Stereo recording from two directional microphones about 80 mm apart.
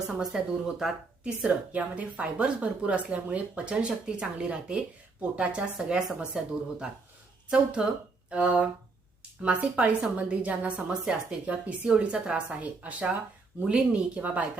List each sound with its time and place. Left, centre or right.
0.1 s speech: centre